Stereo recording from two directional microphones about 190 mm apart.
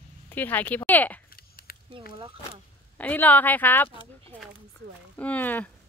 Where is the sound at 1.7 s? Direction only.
50° left (ahead or behind).